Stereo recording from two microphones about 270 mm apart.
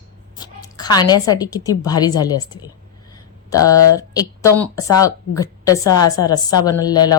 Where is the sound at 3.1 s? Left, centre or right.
Centre.